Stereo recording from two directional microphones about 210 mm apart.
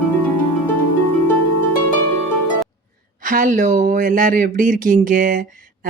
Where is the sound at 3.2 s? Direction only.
40° right (ahead or behind).